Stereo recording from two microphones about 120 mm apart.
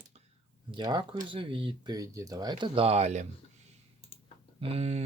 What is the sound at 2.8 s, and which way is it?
Speech, 65° right (ahead or behind).